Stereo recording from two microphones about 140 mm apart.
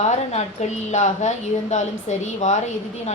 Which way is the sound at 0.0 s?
55° left (ahead or behind).